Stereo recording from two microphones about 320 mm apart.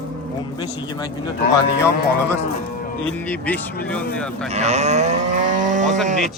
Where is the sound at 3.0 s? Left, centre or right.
Centre.